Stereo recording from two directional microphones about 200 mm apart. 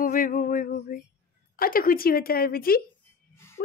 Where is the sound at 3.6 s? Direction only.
45° left (ahead or behind).